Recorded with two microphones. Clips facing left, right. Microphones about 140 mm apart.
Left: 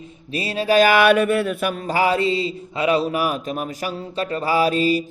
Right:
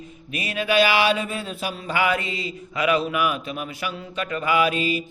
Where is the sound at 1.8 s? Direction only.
35° left (ahead or behind).